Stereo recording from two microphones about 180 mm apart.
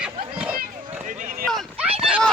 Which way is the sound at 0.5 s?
50° right (ahead or behind).